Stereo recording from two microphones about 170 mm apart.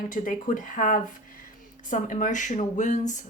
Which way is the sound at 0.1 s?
50° left (ahead or behind).